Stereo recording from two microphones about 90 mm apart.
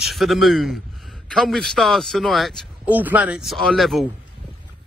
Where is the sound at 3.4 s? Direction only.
Centre (ahead or behind).